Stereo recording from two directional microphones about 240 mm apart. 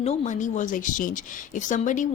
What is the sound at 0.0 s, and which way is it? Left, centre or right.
Speech, left.